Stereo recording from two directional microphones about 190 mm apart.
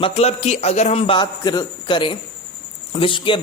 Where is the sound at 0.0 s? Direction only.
35° left (ahead or behind).